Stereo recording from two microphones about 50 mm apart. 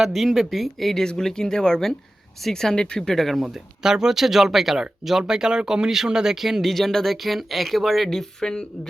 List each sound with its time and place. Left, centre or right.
0.0 s speech: centre
3.2 s speech: centre
3.4 s speech: centre